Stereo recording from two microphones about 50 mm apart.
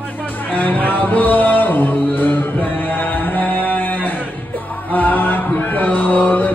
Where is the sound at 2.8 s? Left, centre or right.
Left.